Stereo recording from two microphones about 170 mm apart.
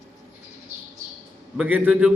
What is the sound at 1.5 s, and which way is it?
Speech, 10° right (ahead or behind).